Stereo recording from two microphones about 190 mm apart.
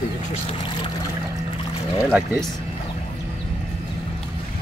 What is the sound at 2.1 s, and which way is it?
Speech, 5° right (ahead or behind).